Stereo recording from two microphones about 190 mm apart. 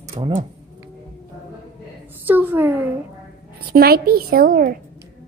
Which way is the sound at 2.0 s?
10° right (ahead or behind).